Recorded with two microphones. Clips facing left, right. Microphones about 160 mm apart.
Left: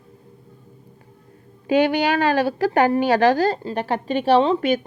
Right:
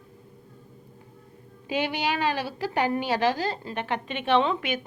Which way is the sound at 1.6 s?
55° left (ahead or behind).